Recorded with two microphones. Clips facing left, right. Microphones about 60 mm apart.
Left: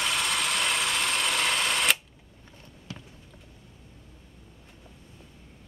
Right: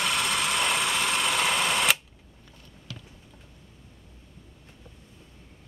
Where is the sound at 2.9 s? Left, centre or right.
Left.